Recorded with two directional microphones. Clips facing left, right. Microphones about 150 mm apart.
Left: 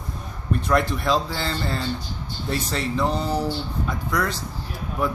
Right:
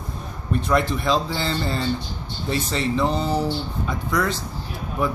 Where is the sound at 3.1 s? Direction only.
25° right (ahead or behind).